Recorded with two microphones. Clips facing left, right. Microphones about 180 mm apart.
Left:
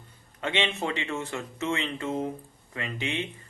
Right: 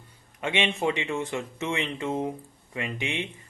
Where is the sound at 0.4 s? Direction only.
15° right (ahead or behind).